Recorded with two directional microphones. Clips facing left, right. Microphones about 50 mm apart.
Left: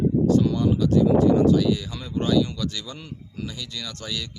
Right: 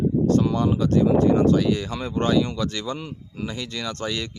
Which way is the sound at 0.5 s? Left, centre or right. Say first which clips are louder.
Even; right.